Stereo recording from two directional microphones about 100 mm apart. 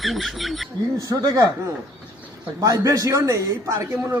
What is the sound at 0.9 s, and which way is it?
Speech, 35° right (ahead or behind).